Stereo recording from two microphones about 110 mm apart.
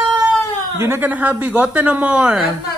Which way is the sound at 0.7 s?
20° right (ahead or behind).